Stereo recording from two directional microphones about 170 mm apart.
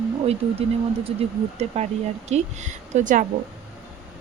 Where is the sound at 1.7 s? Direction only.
40° right (ahead or behind).